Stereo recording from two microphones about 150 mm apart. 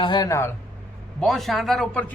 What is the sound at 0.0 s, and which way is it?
Speech, 25° left (ahead or behind).